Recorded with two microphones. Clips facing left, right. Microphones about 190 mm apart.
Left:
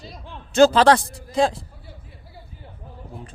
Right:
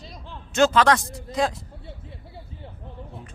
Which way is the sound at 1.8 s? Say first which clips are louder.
Right 4 dB; 25° right (ahead or behind).